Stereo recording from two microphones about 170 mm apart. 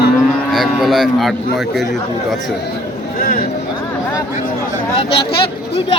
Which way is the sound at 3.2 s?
55° left (ahead or behind).